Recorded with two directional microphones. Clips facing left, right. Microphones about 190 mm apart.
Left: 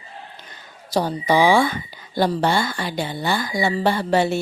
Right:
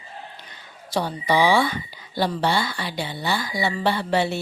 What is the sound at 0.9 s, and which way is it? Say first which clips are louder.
A woman's voice: left 3 dB; 40° left (ahead or behind).